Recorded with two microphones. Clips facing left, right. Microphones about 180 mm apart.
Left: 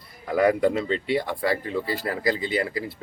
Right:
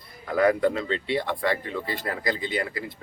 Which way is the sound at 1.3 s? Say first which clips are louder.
Left 1 dB; 35° left (ahead or behind).